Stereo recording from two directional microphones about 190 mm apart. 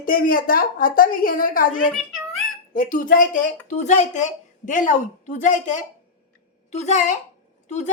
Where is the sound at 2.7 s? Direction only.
45° left (ahead or behind).